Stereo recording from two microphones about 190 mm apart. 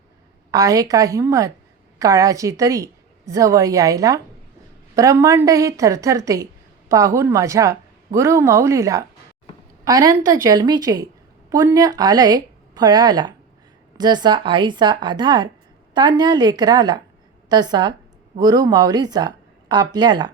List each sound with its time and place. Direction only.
0.5 s a woman's voice: 15° right (ahead or behind)